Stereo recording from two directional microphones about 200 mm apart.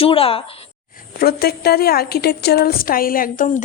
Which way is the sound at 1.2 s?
50° left (ahead or behind).